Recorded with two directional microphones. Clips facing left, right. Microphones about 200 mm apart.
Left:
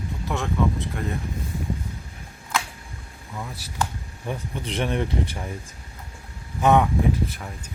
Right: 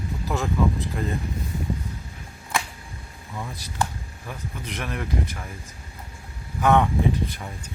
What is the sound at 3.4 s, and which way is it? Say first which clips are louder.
Speech: even; 5° left (ahead or behind).